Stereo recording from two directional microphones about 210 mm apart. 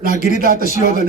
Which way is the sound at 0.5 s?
35° left (ahead or behind).